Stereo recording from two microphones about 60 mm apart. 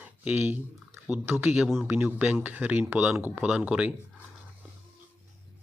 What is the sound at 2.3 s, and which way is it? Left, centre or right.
Speech, right.